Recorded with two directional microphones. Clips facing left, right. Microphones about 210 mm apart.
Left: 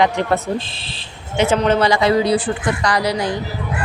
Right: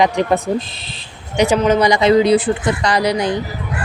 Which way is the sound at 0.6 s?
30° left (ahead or behind).